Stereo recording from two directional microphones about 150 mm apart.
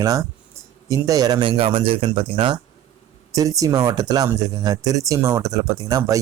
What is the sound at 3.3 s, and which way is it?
A man's voice, 20° right (ahead or behind).